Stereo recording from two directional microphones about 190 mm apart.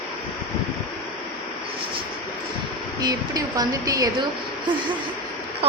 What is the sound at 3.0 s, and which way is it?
A woman's voice, 20° right (ahead or behind).